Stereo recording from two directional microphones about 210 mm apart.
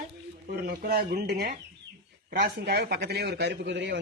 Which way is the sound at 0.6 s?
50° right (ahead or behind).